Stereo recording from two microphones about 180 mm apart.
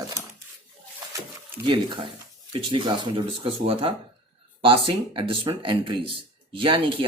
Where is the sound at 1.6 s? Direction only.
25° right (ahead or behind).